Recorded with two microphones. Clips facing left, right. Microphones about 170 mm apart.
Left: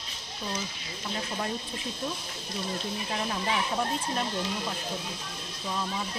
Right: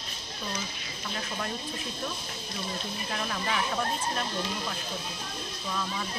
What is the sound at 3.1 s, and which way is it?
Speech, 20° left (ahead or behind).